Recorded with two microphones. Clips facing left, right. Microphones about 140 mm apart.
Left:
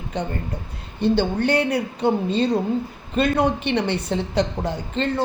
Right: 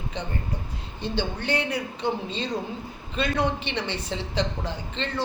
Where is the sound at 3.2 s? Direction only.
50° left (ahead or behind).